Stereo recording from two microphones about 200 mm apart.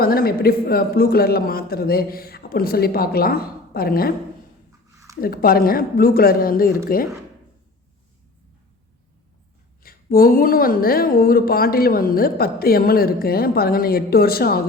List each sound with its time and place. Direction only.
0.0 s a woman's voice: 50° left (ahead or behind)
5.2 s a woman's voice: 50° left (ahead or behind)
9.8 s a woman's voice: 45° left (ahead or behind)